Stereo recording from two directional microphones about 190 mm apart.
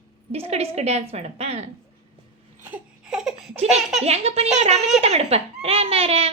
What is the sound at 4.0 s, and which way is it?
Speech, 35° right (ahead or behind).